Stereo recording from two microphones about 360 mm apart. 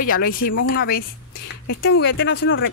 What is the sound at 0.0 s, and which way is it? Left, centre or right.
A woman's voice, left.